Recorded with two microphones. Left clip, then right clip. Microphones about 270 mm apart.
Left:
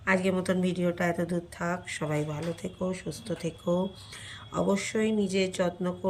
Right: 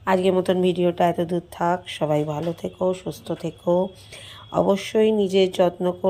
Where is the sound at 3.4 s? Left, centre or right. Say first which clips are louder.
Right 8 dB; right.